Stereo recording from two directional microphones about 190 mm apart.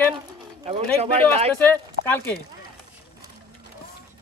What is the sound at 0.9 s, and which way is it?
Speech, 30° right (ahead or behind).